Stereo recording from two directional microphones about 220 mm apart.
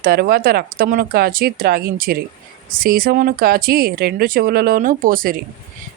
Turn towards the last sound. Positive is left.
turn(degrees=-40)  # may be behind; listen again after turning